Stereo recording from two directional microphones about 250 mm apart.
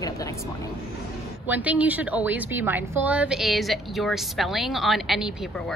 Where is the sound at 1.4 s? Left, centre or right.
Centre.